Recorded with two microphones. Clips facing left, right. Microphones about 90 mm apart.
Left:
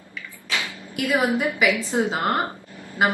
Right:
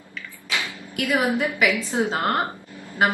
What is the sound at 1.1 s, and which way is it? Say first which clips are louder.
Speech: left 1 dB; 20° left (ahead or behind).